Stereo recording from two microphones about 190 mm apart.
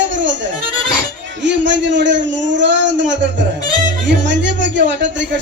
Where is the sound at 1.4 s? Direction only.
70° right (ahead or behind).